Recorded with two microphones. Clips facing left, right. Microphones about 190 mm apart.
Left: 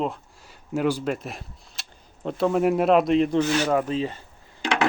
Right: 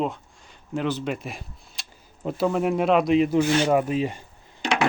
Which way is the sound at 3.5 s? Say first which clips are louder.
Right 2 dB; 25° right (ahead or behind).